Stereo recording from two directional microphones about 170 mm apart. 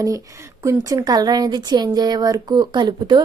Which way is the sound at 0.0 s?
20° right (ahead or behind).